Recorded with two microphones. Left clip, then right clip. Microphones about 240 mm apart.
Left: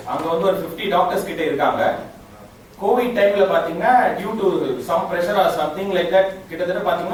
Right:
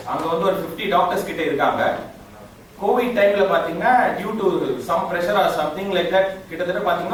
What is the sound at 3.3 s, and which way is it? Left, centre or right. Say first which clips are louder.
Speech: left 1 dB; centre.